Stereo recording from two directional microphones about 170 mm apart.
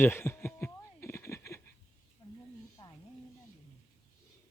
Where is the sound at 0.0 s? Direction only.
15° left (ahead or behind).